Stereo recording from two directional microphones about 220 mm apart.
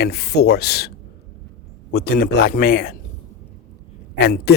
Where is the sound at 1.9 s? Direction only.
45° left (ahead or behind).